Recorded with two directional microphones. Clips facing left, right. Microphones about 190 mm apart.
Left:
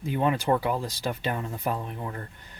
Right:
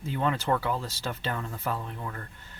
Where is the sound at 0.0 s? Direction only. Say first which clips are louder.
Left 3 dB; 15° left (ahead or behind).